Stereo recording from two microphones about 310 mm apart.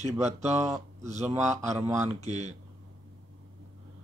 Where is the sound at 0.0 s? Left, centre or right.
Right.